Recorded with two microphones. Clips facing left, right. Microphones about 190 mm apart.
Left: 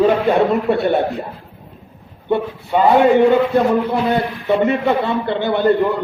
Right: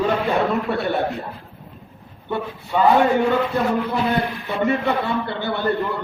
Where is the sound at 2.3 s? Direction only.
20° left (ahead or behind).